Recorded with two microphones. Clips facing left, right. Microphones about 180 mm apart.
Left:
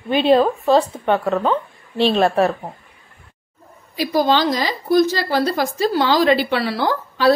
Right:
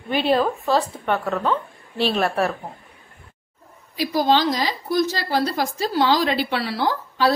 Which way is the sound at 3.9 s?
70° left (ahead or behind).